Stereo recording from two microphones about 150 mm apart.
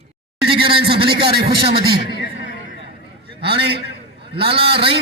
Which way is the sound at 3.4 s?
90° right.